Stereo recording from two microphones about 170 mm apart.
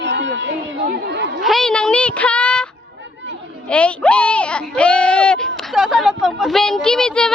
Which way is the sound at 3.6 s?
5° left (ahead or behind).